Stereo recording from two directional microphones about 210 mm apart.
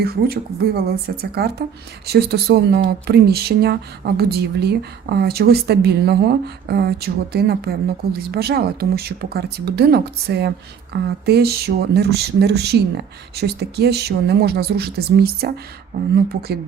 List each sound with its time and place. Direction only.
0.0 s speech: 50° right (ahead or behind)